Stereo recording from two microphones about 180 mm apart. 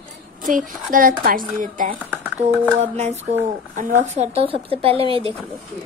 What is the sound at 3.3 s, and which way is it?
A woman's voice, 40° right (ahead or behind).